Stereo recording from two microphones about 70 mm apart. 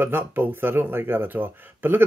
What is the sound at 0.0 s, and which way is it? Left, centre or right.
Speech, right.